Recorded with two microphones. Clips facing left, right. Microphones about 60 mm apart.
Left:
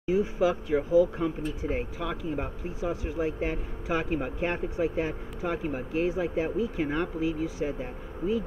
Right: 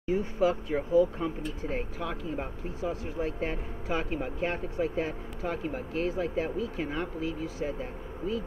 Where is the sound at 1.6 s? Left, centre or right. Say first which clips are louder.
Left 1 dB; centre.